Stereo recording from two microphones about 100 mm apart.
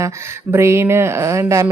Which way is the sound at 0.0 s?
30° right (ahead or behind).